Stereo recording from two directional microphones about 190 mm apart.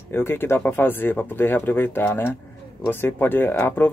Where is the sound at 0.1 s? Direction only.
10° left (ahead or behind).